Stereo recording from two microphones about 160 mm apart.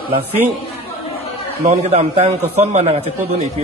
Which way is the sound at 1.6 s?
45° right (ahead or behind).